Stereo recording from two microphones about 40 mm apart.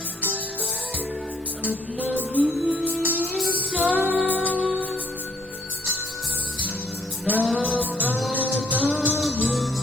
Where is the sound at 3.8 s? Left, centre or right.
Right.